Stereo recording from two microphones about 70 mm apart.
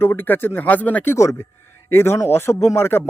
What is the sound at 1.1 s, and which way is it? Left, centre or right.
Speech, left.